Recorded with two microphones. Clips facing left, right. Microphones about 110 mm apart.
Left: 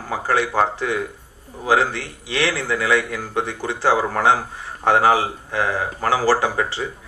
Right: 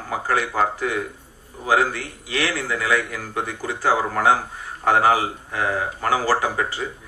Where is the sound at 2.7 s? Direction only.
30° left (ahead or behind).